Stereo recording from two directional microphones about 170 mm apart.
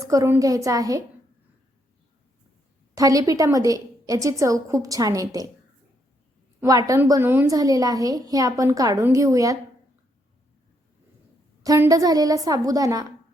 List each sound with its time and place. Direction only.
0.0 s a child's voice: 20° right (ahead or behind)
2.9 s a child's voice: 20° right (ahead or behind)
6.6 s a child's voice: 20° right (ahead or behind)
11.6 s a child's voice: 20° right (ahead or behind)